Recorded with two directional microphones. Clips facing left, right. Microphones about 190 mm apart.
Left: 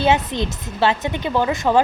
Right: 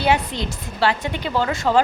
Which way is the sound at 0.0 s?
20° left (ahead or behind).